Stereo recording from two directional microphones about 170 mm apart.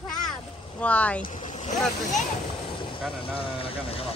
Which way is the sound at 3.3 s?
35° left (ahead or behind).